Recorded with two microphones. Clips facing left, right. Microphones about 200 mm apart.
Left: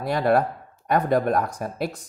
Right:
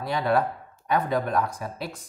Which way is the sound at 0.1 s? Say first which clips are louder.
Left 3 dB; 50° left (ahead or behind).